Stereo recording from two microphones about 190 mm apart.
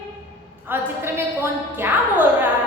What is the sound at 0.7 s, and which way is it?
A woman's voice, 10° right (ahead or behind).